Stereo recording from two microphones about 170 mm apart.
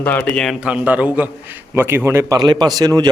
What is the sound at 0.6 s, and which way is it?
A man's voice, 5° right (ahead or behind).